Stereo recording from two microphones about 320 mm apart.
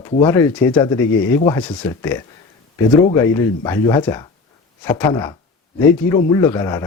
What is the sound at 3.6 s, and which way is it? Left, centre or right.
Speech, centre.